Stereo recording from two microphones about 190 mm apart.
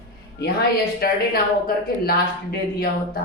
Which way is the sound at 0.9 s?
50° left (ahead or behind).